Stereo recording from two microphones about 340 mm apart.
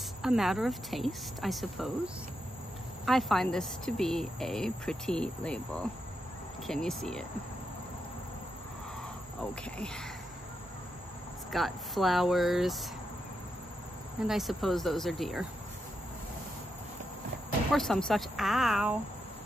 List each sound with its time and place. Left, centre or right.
0.2 s speech: centre
3.1 s speech: centre
9.4 s speech: centre
11.5 s speech: centre
14.2 s speech: centre
17.7 s speech: centre